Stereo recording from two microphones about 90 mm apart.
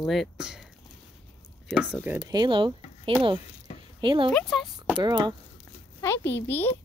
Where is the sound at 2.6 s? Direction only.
70° right (ahead or behind).